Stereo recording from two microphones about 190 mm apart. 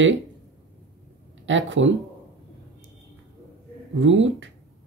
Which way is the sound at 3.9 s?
80° right.